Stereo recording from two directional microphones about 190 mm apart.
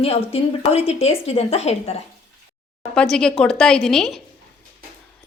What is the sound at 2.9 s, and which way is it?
A woman's voice, 5° left (ahead or behind).